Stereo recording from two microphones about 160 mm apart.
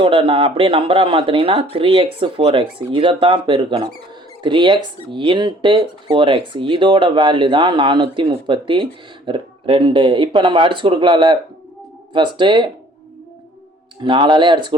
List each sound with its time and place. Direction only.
0.0 s speech: 35° right (ahead or behind)
14.0 s speech: 30° right (ahead or behind)